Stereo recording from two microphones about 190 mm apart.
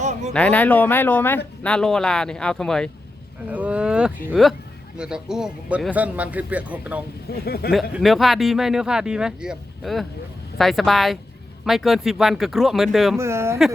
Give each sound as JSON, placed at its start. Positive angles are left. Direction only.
{"t": 0.0, "sound": "a sound", "side_deg": -35}
{"t": 0.3, "sound": "speech", "side_deg": 5}
{"t": 7.3, "sound": "speech", "side_deg": 55}
{"t": 7.7, "sound": "speech", "side_deg": 0}
{"t": 13.1, "sound": "speech", "side_deg": -15}